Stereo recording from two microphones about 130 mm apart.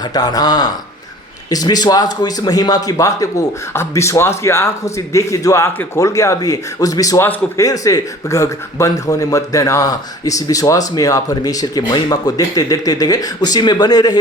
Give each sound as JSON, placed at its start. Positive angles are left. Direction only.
{"t": 0.0, "sound": "a man's voice", "side_deg": 30}
{"t": 7.3, "sound": "speech", "side_deg": 15}
{"t": 7.6, "sound": "speech", "side_deg": 25}